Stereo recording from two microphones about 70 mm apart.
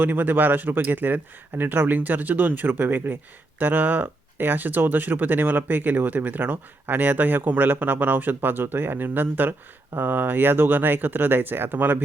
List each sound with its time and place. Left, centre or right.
0.0 s speech: right